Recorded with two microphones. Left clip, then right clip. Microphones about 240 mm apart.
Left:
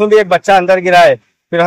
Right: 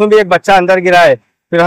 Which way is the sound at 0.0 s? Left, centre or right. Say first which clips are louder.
Right 1 dB; right.